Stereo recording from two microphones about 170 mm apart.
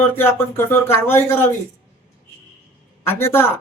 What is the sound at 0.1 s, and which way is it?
Speech, 15° left (ahead or behind).